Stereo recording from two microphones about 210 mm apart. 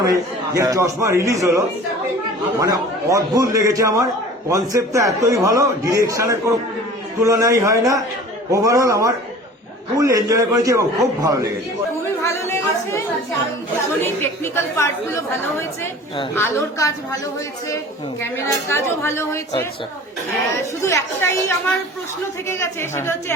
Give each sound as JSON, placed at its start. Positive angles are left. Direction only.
{"t": 0.0, "sound": "a man's voice", "side_deg": -15}
{"t": 12.2, "sound": "speech", "side_deg": 10}
{"t": 14.0, "sound": "a woman's voice", "side_deg": 10}
{"t": 18.2, "sound": "a woman's voice", "side_deg": 10}
{"t": 20.8, "sound": "a woman's voice", "side_deg": 10}
{"t": 22.4, "sound": "a woman's voice", "side_deg": 10}